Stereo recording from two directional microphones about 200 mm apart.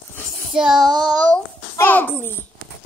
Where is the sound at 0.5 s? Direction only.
5° right (ahead or behind).